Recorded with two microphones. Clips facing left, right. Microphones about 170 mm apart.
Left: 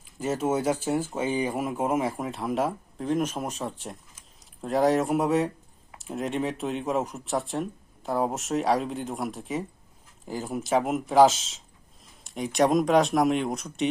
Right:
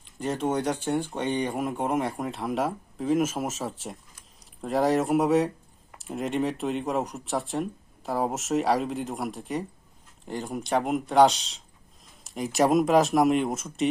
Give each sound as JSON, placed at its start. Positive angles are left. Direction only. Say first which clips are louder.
{"t": 0.0, "sound": "speech", "louder": "left 1 dB", "side_deg": 5}